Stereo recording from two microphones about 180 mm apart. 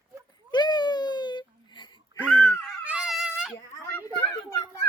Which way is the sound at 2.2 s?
10° left (ahead or behind).